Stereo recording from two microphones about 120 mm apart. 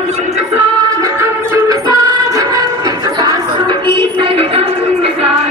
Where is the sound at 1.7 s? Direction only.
30° right (ahead or behind); by 5.3 s 55° right (ahead or behind).